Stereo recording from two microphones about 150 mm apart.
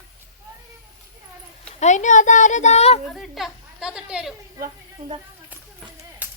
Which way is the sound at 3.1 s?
Centre (ahead or behind).